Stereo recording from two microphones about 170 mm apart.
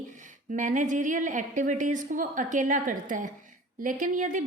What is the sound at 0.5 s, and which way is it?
A woman's voice, 50° right (ahead or behind).